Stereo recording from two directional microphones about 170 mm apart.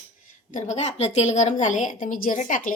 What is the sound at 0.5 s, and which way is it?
A woman's voice, 45° left (ahead or behind).